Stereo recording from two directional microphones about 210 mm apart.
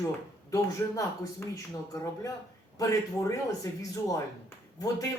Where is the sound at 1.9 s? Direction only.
15° left (ahead or behind).